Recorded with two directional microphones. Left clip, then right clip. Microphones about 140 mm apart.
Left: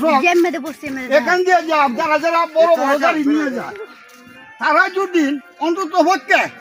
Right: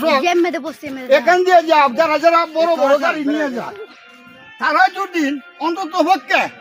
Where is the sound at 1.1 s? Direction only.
25° right (ahead or behind).